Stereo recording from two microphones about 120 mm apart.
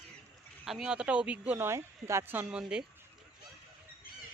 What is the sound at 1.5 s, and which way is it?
Speech, 20° right (ahead or behind).